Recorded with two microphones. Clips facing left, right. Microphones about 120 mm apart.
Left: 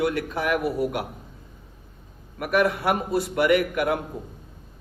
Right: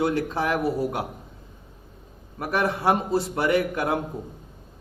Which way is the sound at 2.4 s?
25° right (ahead or behind).